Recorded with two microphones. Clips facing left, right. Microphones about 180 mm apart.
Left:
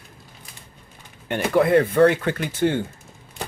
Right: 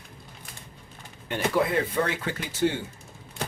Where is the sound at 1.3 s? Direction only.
60° left (ahead or behind).